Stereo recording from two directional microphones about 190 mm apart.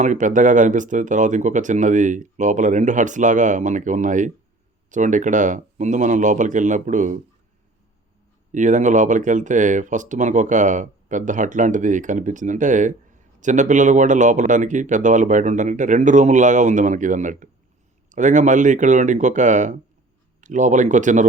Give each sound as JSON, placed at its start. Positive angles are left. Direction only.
{"t": 0.0, "sound": "speech", "side_deg": -40}
{"t": 8.5, "sound": "speech", "side_deg": -40}